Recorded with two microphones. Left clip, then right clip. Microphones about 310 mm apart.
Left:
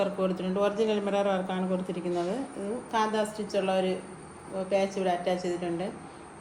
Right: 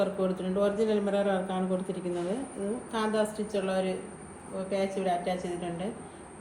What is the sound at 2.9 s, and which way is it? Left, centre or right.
A woman's voice, left.